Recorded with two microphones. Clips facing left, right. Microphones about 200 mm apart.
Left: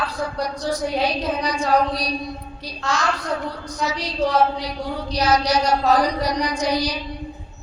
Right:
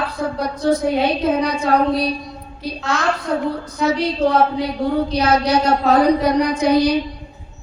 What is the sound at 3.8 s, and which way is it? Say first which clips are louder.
A woman's voice: right 6 dB; 55° right (ahead or behind).